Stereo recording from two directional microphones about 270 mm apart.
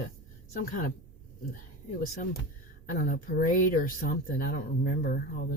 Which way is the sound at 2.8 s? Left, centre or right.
Left.